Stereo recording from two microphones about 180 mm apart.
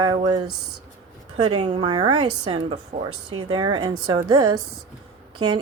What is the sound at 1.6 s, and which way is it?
Speech, 25° right (ahead or behind).